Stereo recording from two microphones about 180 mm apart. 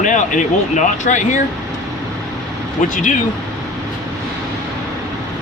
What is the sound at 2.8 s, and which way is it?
Speech, 45° left (ahead or behind).